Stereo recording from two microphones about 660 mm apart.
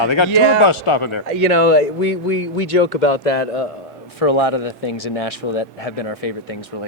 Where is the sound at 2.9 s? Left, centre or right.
Left.